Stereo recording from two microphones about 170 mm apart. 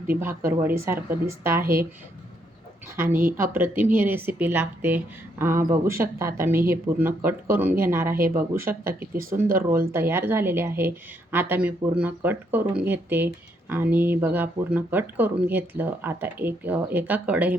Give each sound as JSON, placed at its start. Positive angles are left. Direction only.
{"t": 0.2, "sound": "a woman's voice", "side_deg": -15}
{"t": 2.9, "sound": "a woman's voice", "side_deg": -15}
{"t": 8.9, "sound": "speech", "side_deg": -55}
{"t": 9.6, "sound": "a woman's voice", "side_deg": -15}